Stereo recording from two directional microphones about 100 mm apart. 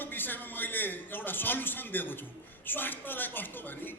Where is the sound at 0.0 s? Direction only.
20° left (ahead or behind).